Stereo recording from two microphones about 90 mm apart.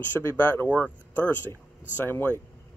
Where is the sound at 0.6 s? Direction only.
15° left (ahead or behind).